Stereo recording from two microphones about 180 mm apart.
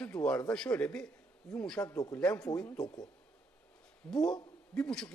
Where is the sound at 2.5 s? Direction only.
5° left (ahead or behind).